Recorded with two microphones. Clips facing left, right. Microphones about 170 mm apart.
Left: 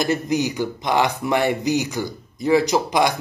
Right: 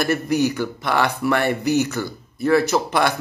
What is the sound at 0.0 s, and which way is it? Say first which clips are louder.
Speech: right 1 dB; 15° left (ahead or behind).